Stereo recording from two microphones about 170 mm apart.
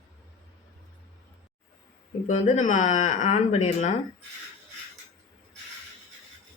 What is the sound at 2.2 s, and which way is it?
Speech, 45° left (ahead or behind).